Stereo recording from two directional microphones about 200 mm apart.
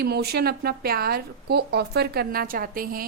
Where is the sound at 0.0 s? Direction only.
55° right (ahead or behind).